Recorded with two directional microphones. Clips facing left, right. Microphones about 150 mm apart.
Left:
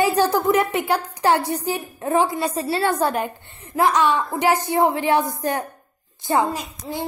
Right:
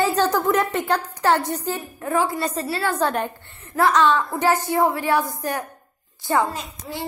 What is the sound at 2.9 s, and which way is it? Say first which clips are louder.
A woman's voice: left 1 dB; 10° left (ahead or behind).